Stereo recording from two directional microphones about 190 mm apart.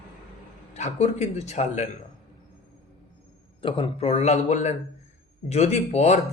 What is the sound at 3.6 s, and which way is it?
A man's voice, 30° left (ahead or behind).